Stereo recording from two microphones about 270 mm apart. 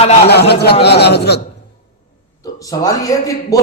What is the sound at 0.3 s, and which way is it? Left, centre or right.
A man's voice, left.